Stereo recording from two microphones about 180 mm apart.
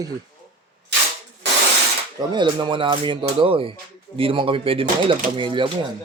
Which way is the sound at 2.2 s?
25° right (ahead or behind).